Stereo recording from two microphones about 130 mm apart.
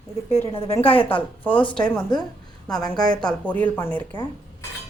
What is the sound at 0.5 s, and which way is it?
A woman's voice, 50° left (ahead or behind).